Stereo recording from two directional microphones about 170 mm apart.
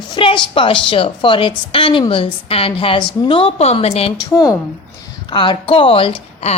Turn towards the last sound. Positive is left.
turn(degrees=35)  # may be behind; listen again after turning